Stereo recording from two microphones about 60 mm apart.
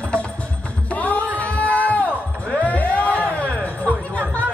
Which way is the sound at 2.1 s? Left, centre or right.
Left.